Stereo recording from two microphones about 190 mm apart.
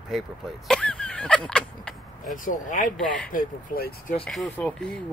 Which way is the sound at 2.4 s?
45° left (ahead or behind).